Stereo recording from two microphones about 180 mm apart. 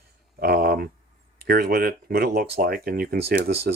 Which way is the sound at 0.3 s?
55° right (ahead or behind).